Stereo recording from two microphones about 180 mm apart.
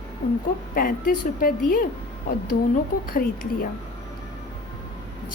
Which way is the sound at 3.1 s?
50° left (ahead or behind).